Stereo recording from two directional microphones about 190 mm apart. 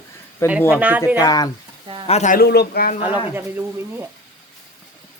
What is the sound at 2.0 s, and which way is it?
Speech, 35° left (ahead or behind).